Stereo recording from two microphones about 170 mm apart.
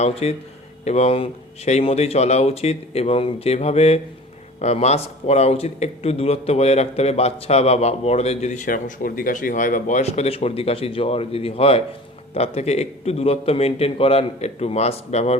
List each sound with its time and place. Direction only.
0.0 s speech: 40° left (ahead or behind)